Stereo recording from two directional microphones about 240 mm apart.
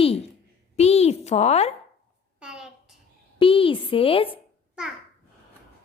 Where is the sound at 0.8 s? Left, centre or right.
Left.